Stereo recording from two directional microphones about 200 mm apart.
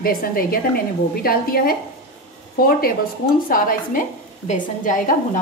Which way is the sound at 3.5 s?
40° left (ahead or behind).